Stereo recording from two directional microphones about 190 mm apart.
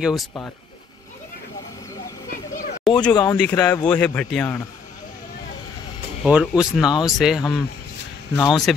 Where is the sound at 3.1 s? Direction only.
20° left (ahead or behind).